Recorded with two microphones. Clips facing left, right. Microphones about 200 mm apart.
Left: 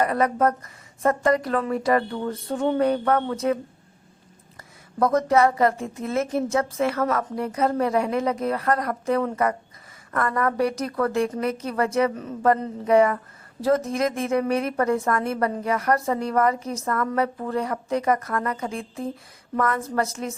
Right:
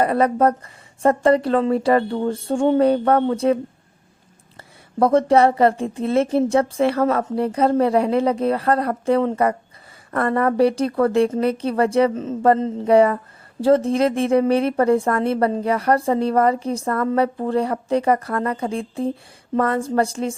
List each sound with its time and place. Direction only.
0.0 s a woman's voice: 30° right (ahead or behind)
2.5 s a sound: 30° right (ahead or behind)
4.9 s a woman's voice: 30° right (ahead or behind)